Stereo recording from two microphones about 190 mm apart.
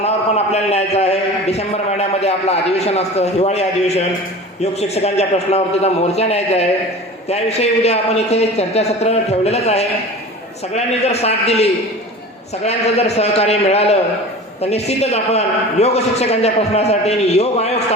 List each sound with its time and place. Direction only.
0.0 s a man's voice: 35° left (ahead or behind)